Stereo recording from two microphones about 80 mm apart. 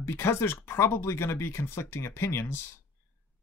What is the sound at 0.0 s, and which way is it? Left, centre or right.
Speech, left.